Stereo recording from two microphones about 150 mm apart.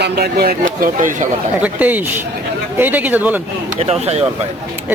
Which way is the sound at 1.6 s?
10° right (ahead or behind).